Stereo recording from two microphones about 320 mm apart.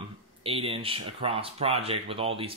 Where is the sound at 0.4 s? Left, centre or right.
Centre.